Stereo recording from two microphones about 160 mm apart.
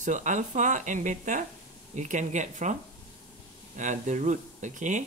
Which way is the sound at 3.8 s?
50° right (ahead or behind).